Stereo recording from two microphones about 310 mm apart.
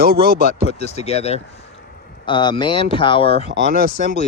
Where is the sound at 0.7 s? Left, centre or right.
Left.